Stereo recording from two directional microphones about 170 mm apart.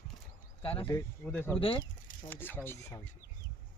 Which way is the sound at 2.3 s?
10° left (ahead or behind).